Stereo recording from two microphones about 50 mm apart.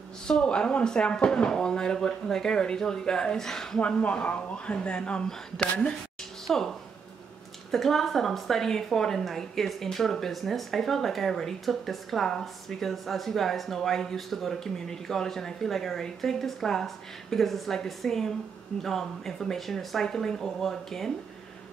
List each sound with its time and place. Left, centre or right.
0.3 s speech: centre
3.8 s speech: left
6.4 s speech: centre
7.7 s a woman's voice: centre